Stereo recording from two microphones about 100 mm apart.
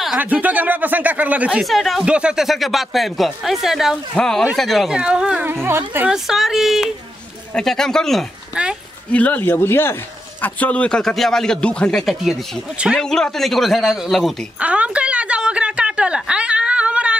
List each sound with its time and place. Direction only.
0.2 s speech: 15° right (ahead or behind)
1.6 s speech: centre (ahead or behind)
2.0 s speech: 10° right (ahead or behind)
4.1 s speech: 5° left (ahead or behind); by 5.5 s 10° right (ahead or behind)
5.5 s speech: 25° right (ahead or behind)
6.0 s speech: 5° right (ahead or behind)
8.5 s speech: 10° right (ahead or behind)
9.1 s speech: 15° left (ahead or behind); by 13.0 s 5° right (ahead or behind)
13.0 s speech: 5° left (ahead or behind)
14.6 s a sound: 10° right (ahead or behind)